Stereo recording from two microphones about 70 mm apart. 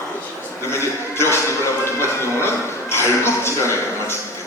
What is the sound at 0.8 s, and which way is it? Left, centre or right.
Speech, left.